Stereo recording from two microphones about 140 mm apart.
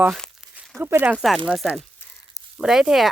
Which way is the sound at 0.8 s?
15° right (ahead or behind).